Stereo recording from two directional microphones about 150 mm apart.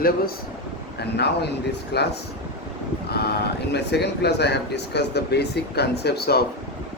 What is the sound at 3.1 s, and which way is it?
Speech, 90° left.